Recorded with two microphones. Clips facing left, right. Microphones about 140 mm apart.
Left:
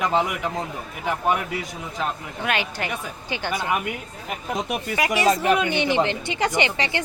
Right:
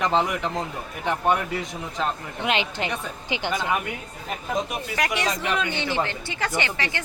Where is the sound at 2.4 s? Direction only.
20° right (ahead or behind).